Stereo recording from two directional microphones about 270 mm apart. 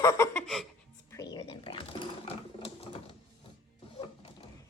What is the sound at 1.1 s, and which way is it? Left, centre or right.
Sewing machine, centre.